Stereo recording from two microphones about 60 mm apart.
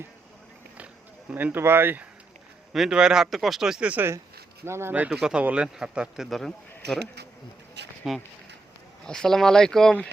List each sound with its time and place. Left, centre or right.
1.3 s speech: right
1.5 s speech: right
2.7 s speech: centre
3.2 s speech: centre
4.6 s speech: right
5.4 s speech: right
6.3 s speech: centre
8.0 s speech: centre
9.0 s speech: centre